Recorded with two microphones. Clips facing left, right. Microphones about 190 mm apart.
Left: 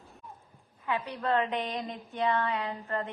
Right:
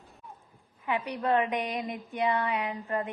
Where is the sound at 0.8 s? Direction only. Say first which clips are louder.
Right 2 dB; 15° right (ahead or behind).